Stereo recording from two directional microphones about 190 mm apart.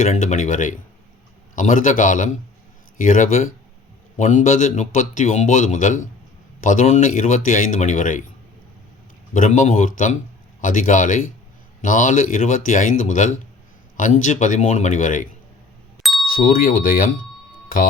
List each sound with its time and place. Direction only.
0.0 s a man's voice: 40° left (ahead or behind)
9.3 s a man's voice: 40° left (ahead or behind)
16.3 s speech: 50° left (ahead or behind)